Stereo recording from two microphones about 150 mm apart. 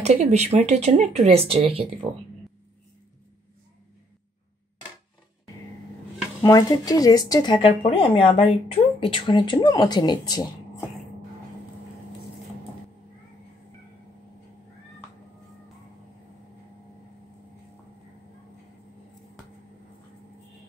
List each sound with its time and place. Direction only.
0.0 s speech: 50° right (ahead or behind)
6.4 s speech: 25° left (ahead or behind)